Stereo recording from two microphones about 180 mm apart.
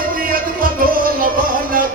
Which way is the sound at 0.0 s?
50° right (ahead or behind).